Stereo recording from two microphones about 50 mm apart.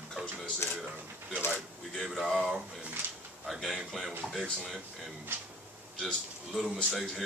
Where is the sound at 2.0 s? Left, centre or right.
Centre.